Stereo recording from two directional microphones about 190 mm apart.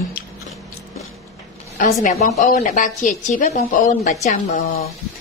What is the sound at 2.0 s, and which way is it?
A woman's voice, 35° left (ahead or behind).